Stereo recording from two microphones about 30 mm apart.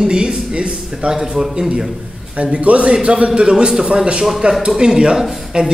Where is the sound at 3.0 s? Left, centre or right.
Right.